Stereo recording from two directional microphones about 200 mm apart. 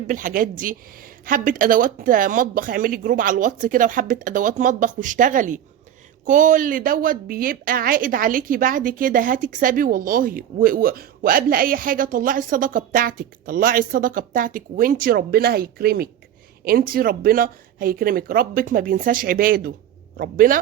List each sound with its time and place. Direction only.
0.1 s speech: 40° right (ahead or behind)